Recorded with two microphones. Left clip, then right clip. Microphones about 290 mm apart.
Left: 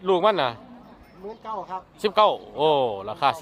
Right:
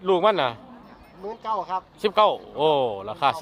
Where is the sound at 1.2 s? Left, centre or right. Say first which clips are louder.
Right 5 dB; centre.